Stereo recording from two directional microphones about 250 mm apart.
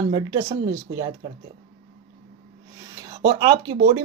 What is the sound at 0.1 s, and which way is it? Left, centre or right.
Speech, centre.